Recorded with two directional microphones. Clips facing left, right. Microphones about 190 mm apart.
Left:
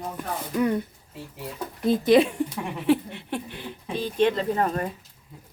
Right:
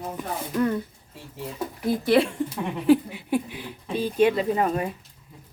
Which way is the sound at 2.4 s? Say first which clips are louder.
Right 3 dB; centre (ahead or behind).